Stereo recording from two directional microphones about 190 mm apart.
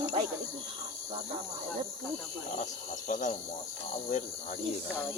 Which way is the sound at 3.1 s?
45° left (ahead or behind).